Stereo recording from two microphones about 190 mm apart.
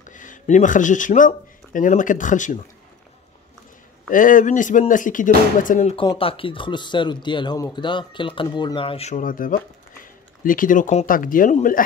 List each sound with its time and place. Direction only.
0.0 s speech: 40° left (ahead or behind)
4.1 s speech: 45° left (ahead or behind)
5.9 s speech: 30° left (ahead or behind); by 11.8 s 45° left (ahead or behind)